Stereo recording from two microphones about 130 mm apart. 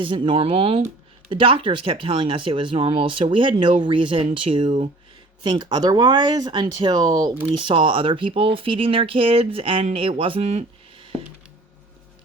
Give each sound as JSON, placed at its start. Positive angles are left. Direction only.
{"t": 0.0, "sound": "speech", "side_deg": -40}
{"t": 4.6, "sound": "speech", "side_deg": -60}
{"t": 5.4, "sound": "speech", "side_deg": -35}